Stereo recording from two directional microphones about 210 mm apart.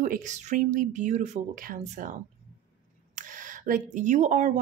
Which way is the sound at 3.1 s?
40° right (ahead or behind).